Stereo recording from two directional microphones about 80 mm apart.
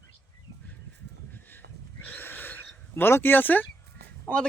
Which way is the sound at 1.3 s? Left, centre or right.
Left.